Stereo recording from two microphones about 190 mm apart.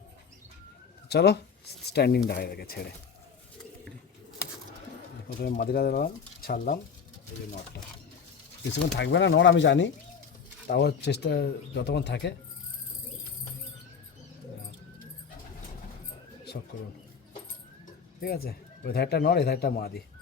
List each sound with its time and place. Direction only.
1.1 s speech: 60° left (ahead or behind)
5.4 s speech: 55° left (ahead or behind)
8.7 s speech: 70° left (ahead or behind)
10.7 s speech: 55° left (ahead or behind)
18.2 s speech: 55° left (ahead or behind)